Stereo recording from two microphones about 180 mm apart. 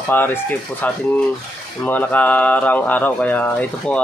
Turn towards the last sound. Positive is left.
turn(degrees=10)  # may be behind; listen again after turning